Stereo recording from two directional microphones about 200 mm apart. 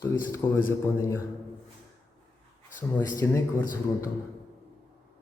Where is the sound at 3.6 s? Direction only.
40° left (ahead or behind).